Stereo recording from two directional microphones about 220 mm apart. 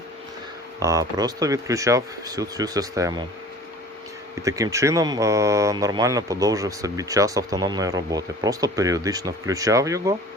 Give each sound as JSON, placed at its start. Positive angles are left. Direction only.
{"t": 0.8, "sound": "speech", "side_deg": -15}
{"t": 4.4, "sound": "speech", "side_deg": -15}